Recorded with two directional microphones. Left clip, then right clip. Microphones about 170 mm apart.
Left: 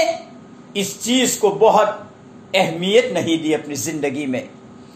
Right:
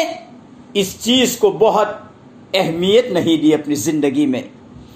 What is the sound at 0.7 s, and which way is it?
A man's voice, 40° right (ahead or behind).